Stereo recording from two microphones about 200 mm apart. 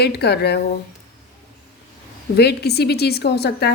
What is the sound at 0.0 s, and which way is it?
Speech, 55° left (ahead or behind).